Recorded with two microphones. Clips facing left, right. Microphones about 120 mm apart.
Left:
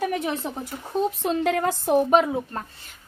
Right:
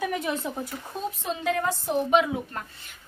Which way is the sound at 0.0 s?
35° left (ahead or behind).